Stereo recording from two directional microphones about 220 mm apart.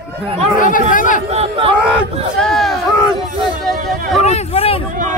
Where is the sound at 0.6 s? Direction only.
40° left (ahead or behind).